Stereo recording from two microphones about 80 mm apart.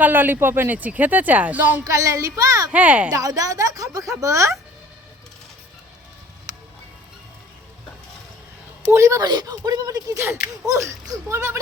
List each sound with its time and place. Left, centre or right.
0.0 s speech: right
1.8 s speech: right
2.7 s speech: centre
3.1 s speech: right
8.9 s speech: right
9.2 s speech: right
10.2 s speech: right